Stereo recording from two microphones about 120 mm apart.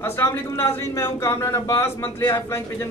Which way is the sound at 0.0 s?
20° left (ahead or behind).